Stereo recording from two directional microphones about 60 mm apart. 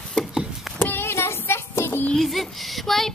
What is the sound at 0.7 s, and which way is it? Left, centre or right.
Child singing, left.